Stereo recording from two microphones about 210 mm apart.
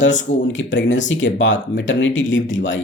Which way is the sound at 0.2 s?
60° left (ahead or behind).